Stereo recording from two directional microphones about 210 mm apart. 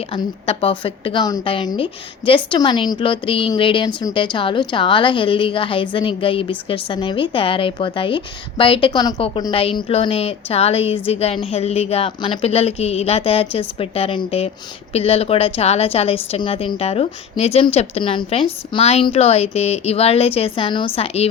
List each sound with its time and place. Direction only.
0.1 s a woman's voice: 25° left (ahead or behind)